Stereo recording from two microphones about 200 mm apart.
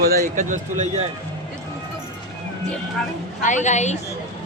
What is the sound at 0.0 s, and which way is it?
Speech, 45° right (ahead or behind).